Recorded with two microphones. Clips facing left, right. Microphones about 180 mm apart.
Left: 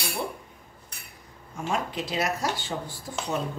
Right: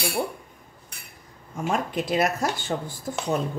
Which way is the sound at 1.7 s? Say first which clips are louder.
Right 4 dB; 50° right (ahead or behind).